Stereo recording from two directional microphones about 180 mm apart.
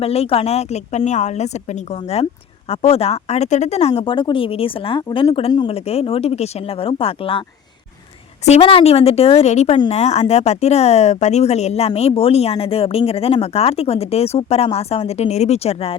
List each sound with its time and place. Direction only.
0.0 s a woman's voice: 35° left (ahead or behind)
8.4 s a woman's voice: 35° left (ahead or behind)